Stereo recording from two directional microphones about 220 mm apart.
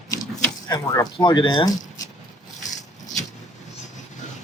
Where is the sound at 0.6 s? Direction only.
15° left (ahead or behind).